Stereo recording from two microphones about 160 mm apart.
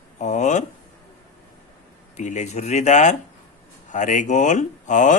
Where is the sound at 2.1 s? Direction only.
50° left (ahead or behind).